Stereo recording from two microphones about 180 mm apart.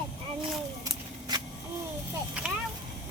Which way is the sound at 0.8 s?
20° right (ahead or behind).